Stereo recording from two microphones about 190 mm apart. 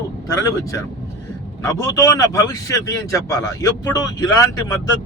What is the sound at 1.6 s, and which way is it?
Speech, 15° left (ahead or behind).